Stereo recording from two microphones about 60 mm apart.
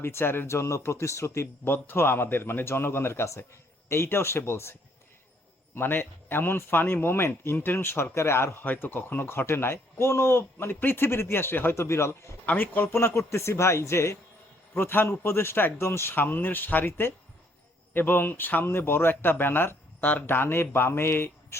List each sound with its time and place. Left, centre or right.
0.0 s a man's voice: left
1.6 s a man's voice: left
5.7 s a man's voice: left
8.6 s a man's voice: left
11.7 s a man's voice: left
12.5 s a man's voice: left
14.8 s a man's voice: left